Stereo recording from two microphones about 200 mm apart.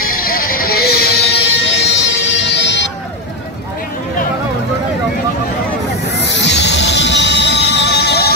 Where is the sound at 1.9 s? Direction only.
65° left (ahead or behind).